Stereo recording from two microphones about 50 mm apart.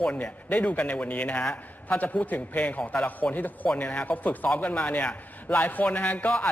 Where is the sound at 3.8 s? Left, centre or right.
Left.